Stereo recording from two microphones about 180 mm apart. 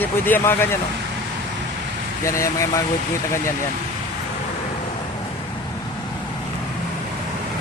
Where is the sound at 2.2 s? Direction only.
15° left (ahead or behind).